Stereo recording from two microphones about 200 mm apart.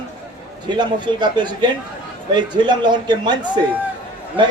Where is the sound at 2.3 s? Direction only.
20° right (ahead or behind).